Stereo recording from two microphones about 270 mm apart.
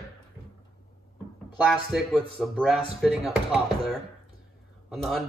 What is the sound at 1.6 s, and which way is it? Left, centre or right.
Speech, centre.